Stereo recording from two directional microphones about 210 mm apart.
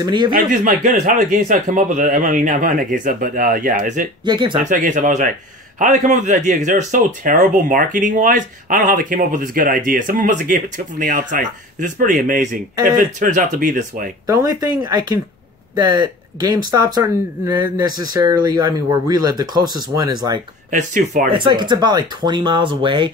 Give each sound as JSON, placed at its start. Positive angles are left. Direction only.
{"t": 0.0, "sound": "speech", "side_deg": -20}
{"t": 0.3, "sound": "speech", "side_deg": -40}
{"t": 4.2, "sound": "speech", "side_deg": -20}
{"t": 4.6, "sound": "speech", "side_deg": -40}
{"t": 14.2, "sound": "speech", "side_deg": -15}
{"t": 20.7, "sound": "speech", "side_deg": -35}
{"t": 21.3, "sound": "speech", "side_deg": -20}